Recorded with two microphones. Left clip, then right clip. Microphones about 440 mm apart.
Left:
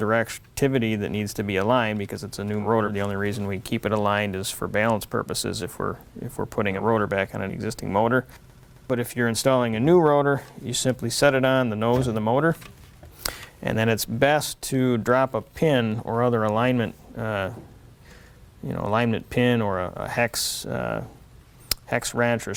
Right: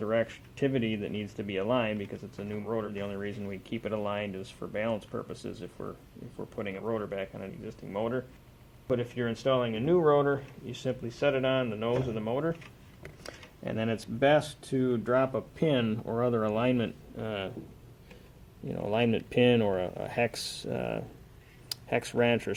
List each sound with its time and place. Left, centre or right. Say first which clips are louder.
0.0 s speech: left 6 dB; left
18.7 s speech: left 5 dB; left